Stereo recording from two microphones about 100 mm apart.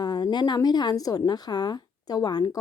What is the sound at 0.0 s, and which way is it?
A woman's voice, 45° left (ahead or behind).